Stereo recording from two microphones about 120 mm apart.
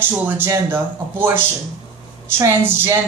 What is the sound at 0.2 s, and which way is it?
A woman's voice, 15° right (ahead or behind).